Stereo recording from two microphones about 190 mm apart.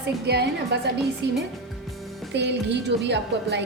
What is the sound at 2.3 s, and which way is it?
A woman's voice, 65° right (ahead or behind).